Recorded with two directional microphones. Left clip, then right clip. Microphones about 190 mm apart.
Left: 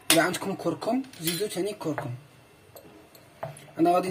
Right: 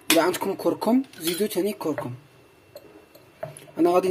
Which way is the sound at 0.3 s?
35° right (ahead or behind).